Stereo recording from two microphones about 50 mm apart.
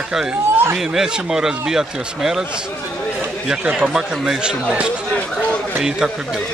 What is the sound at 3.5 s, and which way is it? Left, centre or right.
Speech, centre.